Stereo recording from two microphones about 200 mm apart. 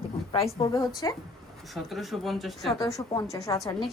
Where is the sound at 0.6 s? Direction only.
20° left (ahead or behind).